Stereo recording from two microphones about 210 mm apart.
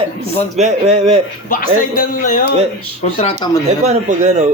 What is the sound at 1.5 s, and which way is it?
Speech, 40° left (ahead or behind).